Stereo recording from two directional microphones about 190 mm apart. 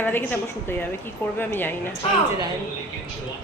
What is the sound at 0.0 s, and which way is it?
A man's voice, 10° left (ahead or behind).